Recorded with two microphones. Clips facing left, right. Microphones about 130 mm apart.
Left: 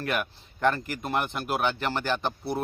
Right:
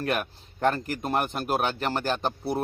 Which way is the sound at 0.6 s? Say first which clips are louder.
Right 1 dB; 40° right (ahead or behind).